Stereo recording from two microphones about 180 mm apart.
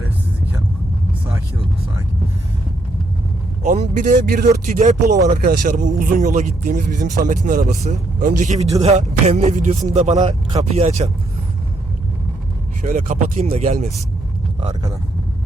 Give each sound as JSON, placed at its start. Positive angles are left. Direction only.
{"t": 3.6, "sound": "speech", "side_deg": -45}
{"t": 4.6, "sound": "speech", "side_deg": -40}
{"t": 10.2, "sound": "speech", "side_deg": -25}
{"t": 10.6, "sound": "speech", "side_deg": -40}
{"t": 12.8, "sound": "speech", "side_deg": -45}